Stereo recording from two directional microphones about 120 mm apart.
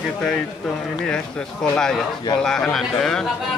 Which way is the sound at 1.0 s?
5° left (ahead or behind).